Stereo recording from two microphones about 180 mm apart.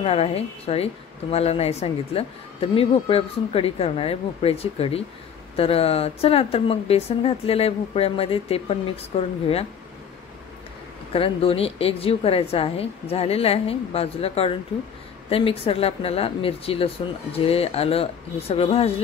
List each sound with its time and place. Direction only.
0.0 s speech: 30° left (ahead or behind)
11.1 s speech: 30° left (ahead or behind)